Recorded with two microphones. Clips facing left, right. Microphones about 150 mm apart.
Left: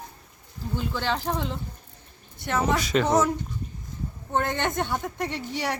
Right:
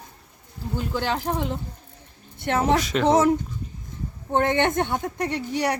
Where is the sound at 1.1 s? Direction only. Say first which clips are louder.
Even; 10° right (ahead or behind).